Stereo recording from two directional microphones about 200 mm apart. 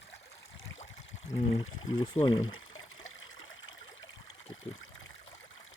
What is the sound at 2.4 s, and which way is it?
Trickle, 85° left.